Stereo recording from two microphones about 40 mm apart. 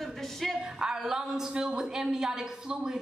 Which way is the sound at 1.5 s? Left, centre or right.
Right.